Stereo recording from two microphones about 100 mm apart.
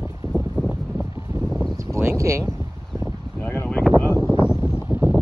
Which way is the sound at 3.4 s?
25° left (ahead or behind).